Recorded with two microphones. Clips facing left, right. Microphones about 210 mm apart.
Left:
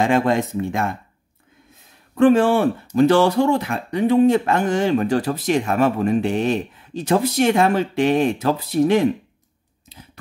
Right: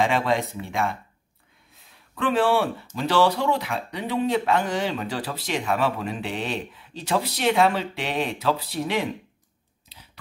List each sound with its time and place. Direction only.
0.0 s speech: 45° left (ahead or behind)
1.8 s a sound: 45° left (ahead or behind)
3.0 s speech: 50° left (ahead or behind)